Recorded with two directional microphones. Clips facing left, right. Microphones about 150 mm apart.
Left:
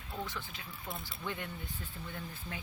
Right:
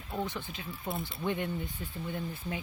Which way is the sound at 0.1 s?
20° right (ahead or behind).